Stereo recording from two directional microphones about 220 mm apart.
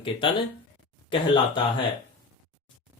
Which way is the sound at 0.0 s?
25° left (ahead or behind).